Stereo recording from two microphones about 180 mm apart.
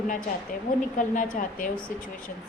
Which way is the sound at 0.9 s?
50° left (ahead or behind).